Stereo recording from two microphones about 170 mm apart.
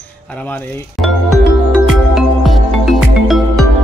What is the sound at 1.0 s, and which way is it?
Music, centre (ahead or behind).